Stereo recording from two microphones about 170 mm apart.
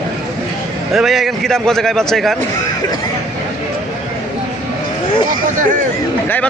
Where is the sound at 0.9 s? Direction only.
Centre (ahead or behind).